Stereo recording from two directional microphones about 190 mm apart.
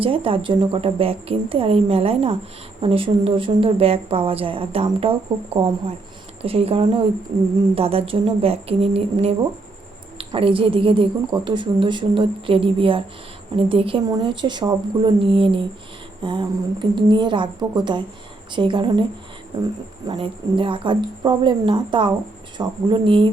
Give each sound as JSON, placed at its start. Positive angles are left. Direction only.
{"t": 0.0, "sound": "a woman's voice", "side_deg": -30}
{"t": 6.4, "sound": "a woman's voice", "side_deg": -30}
{"t": 20.1, "sound": "a woman's voice", "side_deg": -25}